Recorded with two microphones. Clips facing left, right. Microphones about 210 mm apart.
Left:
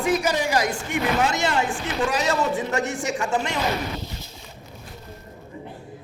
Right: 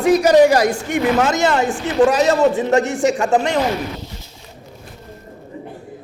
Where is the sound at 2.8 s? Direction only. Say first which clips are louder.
Right 9 dB; 80° right.